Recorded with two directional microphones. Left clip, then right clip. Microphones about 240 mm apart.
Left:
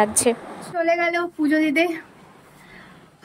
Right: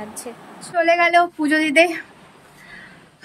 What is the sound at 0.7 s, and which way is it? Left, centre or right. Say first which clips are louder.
Female singing: right 6 dB; centre.